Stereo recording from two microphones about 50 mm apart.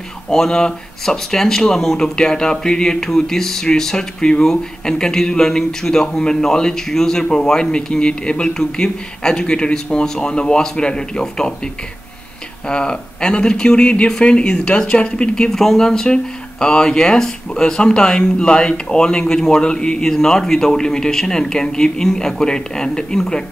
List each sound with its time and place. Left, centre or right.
0.3 s speech: centre